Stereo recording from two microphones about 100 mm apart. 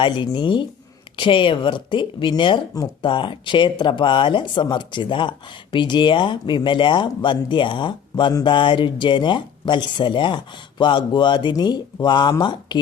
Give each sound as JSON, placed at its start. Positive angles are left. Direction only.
{"t": 0.0, "sound": "speech", "side_deg": 50}